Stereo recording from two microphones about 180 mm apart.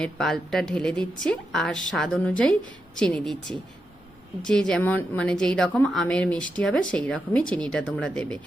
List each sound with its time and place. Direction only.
0.0 s a woman's voice: 5° left (ahead or behind)